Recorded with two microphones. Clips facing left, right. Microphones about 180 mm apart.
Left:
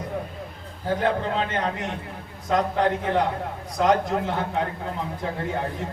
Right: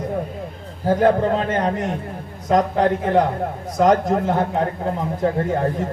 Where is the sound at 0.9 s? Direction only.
45° right (ahead or behind).